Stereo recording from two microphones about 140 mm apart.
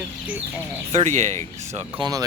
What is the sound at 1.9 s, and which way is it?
Speech, 30° right (ahead or behind).